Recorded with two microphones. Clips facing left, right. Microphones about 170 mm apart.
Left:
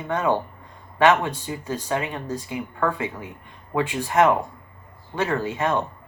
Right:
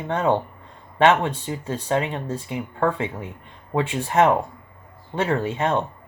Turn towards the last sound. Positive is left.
turn(degrees=-25)  # may be behind; listen again after turning